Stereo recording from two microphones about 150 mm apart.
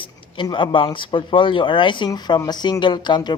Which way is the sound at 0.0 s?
35° left (ahead or behind).